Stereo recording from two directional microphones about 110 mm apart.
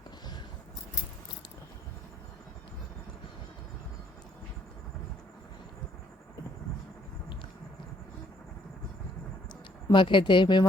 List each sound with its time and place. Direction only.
9.5 s speech: 45° left (ahead or behind)